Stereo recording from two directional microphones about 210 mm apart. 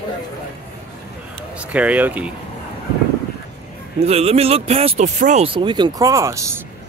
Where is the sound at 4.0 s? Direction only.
30° right (ahead or behind).